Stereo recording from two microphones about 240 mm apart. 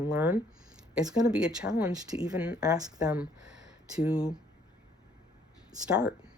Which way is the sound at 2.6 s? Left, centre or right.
Centre.